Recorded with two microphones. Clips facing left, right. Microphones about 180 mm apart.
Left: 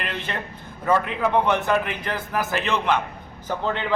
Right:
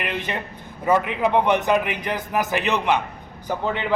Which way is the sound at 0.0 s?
15° right (ahead or behind).